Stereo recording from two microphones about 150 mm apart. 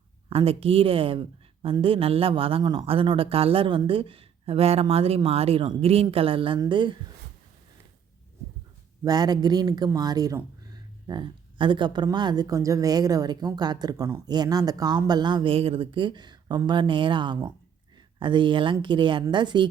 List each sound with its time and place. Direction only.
0.3 s speech: 40° right (ahead or behind)
9.0 s speech: 25° right (ahead or behind)